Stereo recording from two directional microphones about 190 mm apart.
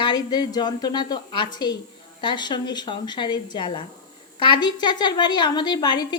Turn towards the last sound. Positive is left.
turn(degrees=20)  # may be behind; listen again after turning